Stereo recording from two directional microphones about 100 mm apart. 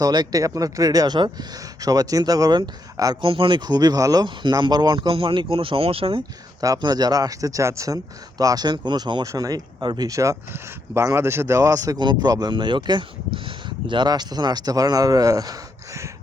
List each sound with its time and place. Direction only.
0.0 s speech: 45° right (ahead or behind)
3.2 s speech: 60° right (ahead or behind)
6.6 s speech: 40° right (ahead or behind)
9.2 s speech: 35° right (ahead or behind)
11.9 s speech: 45° right (ahead or behind)